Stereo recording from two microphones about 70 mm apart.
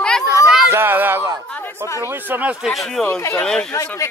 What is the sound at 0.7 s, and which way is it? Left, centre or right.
Speech, right.